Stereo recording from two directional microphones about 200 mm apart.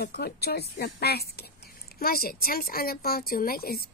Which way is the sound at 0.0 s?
50° left (ahead or behind).